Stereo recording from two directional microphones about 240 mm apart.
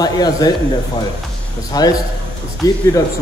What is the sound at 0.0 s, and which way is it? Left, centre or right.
Speech, centre.